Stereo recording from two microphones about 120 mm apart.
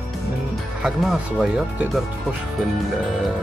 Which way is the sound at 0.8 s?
5° right (ahead or behind).